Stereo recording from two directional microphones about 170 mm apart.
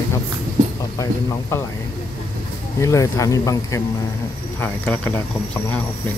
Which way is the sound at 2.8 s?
20° left (ahead or behind).